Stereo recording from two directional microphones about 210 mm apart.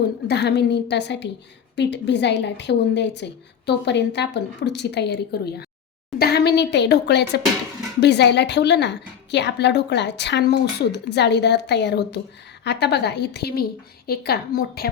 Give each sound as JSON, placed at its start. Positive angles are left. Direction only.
{"t": 0.3, "sound": "a woman's voice", "side_deg": 55}